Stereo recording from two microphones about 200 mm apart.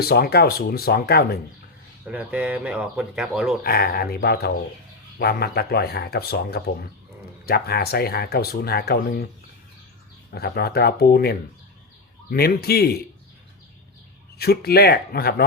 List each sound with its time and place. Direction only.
0.0 s speech: 50° left (ahead or behind)
2.0 s speech: 5° right (ahead or behind)
3.6 s speech: 50° left (ahead or behind)
10.3 s speech: 50° left (ahead or behind)
14.3 s speech: 50° left (ahead or behind)